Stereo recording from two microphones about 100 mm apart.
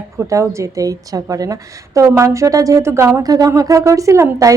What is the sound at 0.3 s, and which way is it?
A woman's voice, 30° right (ahead or behind).